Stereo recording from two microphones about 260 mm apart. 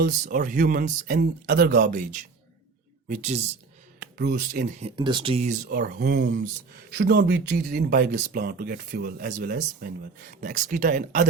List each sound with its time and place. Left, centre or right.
0.0 s speech: right
3.1 s speech: right
4.0 s speech: right
4.9 s speech: centre